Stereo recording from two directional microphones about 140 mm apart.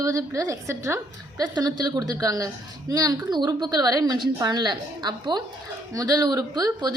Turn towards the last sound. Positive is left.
turn(degrees=-30)  # may be behind; listen again after turning